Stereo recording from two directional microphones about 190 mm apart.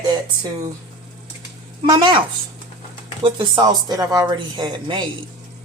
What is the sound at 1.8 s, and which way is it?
Speech, 25° right (ahead or behind).